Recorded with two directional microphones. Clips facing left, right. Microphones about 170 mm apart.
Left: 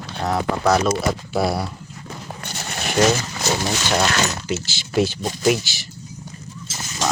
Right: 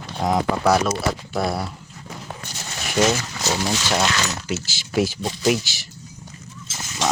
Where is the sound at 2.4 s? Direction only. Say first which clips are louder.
Left 4 dB; 65° left (ahead or behind).